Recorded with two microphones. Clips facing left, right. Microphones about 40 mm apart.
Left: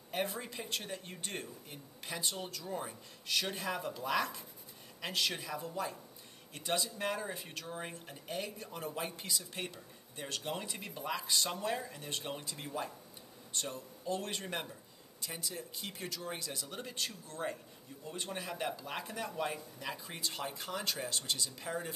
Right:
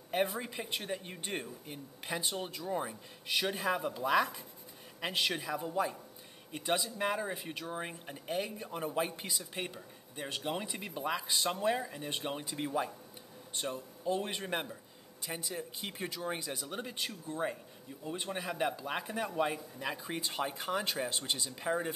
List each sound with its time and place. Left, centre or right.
0.3 s speech: centre